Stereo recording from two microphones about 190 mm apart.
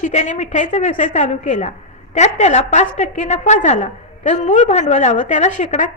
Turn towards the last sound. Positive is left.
turn(degrees=40)  # may be behind; listen again after turning